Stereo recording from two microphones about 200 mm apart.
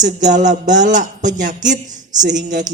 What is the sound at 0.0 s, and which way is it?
A man's voice, 40° right (ahead or behind).